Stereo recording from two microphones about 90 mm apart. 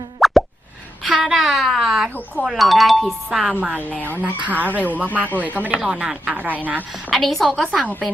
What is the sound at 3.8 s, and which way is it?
Speech, 15° left (ahead or behind).